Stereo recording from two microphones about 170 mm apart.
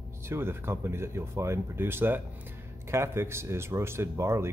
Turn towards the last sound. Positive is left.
turn(degrees=-15)  # may be behind; listen again after turning